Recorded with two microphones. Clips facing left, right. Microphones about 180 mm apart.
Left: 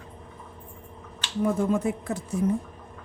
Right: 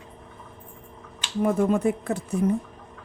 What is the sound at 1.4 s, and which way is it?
Speech, 60° right (ahead or behind).